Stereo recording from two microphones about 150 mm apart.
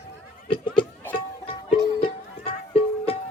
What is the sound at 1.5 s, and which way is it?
Music, 40° left (ahead or behind).